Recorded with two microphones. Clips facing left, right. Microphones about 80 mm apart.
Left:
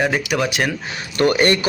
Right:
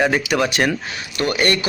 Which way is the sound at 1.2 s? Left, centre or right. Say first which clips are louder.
Left 4 dB; left.